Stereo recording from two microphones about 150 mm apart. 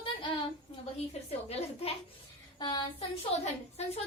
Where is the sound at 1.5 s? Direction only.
40° left (ahead or behind).